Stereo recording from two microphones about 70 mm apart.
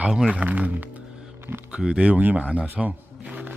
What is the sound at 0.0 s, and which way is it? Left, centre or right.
Speech, centre.